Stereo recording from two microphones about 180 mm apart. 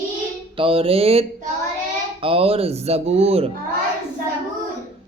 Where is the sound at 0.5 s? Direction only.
30° right (ahead or behind).